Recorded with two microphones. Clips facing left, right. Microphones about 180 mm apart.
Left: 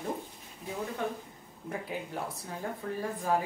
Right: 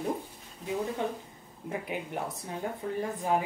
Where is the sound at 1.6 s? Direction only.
20° right (ahead or behind).